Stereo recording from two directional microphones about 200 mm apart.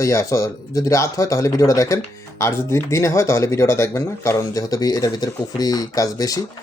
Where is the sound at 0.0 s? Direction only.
15° left (ahead or behind).